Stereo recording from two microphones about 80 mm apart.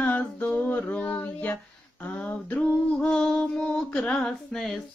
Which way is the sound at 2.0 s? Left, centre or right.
Centre.